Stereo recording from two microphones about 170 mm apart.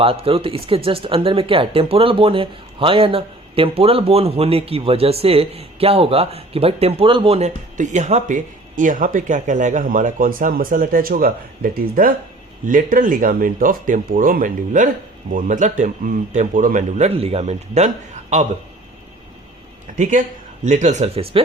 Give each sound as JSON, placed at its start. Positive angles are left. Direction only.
{"t": 0.0, "sound": "speech", "side_deg": -35}
{"t": 17.2, "sound": "speech", "side_deg": -35}
{"t": 20.0, "sound": "speech", "side_deg": -50}